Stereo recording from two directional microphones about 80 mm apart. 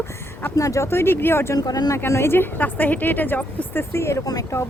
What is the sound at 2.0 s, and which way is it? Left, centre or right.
A woman's voice, left.